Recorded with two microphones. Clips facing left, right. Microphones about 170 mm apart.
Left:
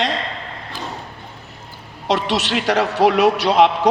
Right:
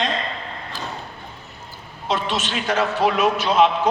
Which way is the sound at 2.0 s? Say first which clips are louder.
Left 4 dB; 75° left (ahead or behind).